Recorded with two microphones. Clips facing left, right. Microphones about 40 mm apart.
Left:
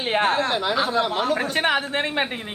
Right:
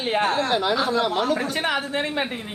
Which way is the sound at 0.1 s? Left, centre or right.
Left.